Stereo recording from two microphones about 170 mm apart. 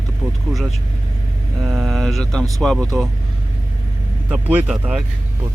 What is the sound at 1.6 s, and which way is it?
Mantra, centre (ahead or behind).